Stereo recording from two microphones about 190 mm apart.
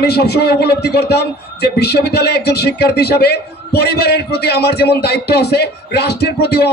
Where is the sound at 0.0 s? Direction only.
60° left (ahead or behind).